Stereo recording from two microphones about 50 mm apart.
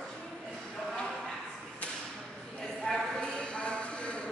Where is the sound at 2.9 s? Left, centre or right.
Centre.